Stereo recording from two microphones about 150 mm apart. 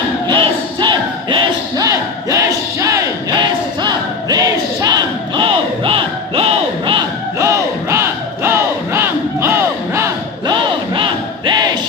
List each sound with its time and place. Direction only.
0.3 s crowd: 30° right (ahead or behind)
7.3 s battle cry: 20° right (ahead or behind)
10.4 s crowd: 30° right (ahead or behind)